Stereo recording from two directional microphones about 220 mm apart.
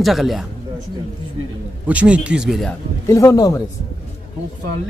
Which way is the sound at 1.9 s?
5° right (ahead or behind).